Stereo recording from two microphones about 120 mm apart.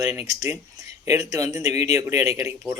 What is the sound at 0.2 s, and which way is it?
Speech, 25° right (ahead or behind).